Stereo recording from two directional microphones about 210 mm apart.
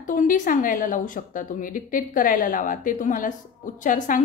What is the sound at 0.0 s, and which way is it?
A woman's voice, 40° left (ahead or behind).